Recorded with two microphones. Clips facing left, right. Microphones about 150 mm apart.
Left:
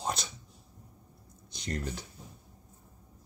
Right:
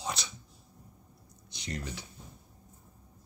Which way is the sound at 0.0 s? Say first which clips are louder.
Left 3 dB; 50° left (ahead or behind).